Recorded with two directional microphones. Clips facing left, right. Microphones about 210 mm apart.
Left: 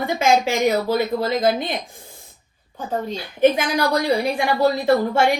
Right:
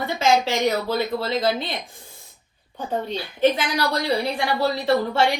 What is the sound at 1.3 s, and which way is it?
Speech, 50° left (ahead or behind).